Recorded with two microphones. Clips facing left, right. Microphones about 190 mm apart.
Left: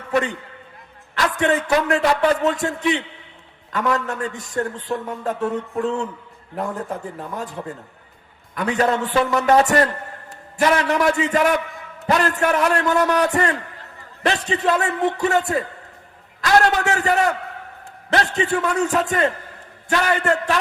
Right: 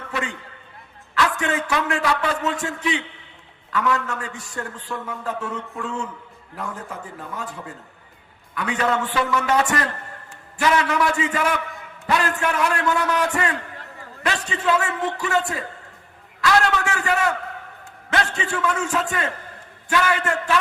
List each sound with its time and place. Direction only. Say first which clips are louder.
0.1 s a man's voice: left 8 dB; 40° left (ahead or behind)
1.4 s a man's voice: left 5 dB; 40° left (ahead or behind)
8.5 s a man's voice: left 3 dB; 40° left (ahead or behind)